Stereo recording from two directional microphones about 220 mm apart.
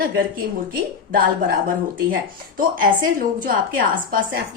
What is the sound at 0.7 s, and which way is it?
Speech, 40° right (ahead or behind).